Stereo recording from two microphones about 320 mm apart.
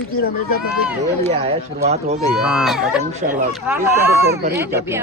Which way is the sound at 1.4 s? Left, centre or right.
Centre.